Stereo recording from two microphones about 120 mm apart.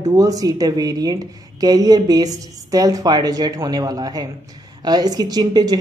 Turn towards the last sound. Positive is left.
turn(degrees=-35)  # may be behind; listen again after turning